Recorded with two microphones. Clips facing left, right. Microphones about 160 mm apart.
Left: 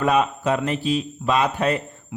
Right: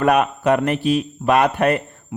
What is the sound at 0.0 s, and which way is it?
A man's voice, 60° right (ahead or behind).